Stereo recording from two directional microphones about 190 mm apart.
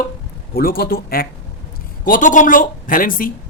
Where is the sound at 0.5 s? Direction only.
50° left (ahead or behind).